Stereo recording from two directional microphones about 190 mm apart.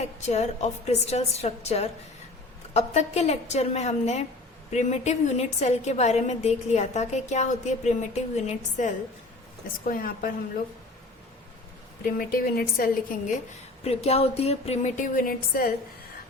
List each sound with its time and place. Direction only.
0.0 s a woman's voice: 35° left (ahead or behind)
9.8 s a woman's voice: 50° left (ahead or behind)
12.0 s a woman's voice: 50° left (ahead or behind)
13.8 s a woman's voice: 35° left (ahead or behind); by 15.7 s 50° left (ahead or behind)